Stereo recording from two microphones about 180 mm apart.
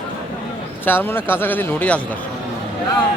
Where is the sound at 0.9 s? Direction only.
10° left (ahead or behind).